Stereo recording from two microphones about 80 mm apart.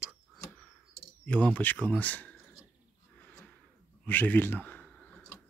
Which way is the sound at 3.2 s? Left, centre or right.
Centre.